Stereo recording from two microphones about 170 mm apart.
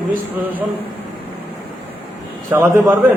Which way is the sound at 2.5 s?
15° right (ahead or behind).